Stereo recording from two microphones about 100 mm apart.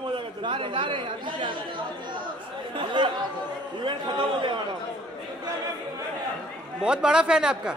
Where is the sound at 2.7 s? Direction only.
55° right (ahead or behind).